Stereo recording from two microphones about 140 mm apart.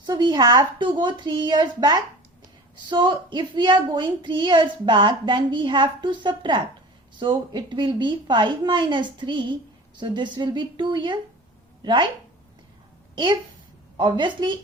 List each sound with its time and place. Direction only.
0.0 s a woman's voice: 30° right (ahead or behind)
13.1 s a woman's voice: 30° right (ahead or behind)